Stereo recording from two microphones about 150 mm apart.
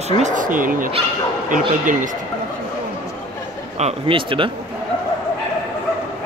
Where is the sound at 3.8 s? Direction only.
40° right (ahead or behind).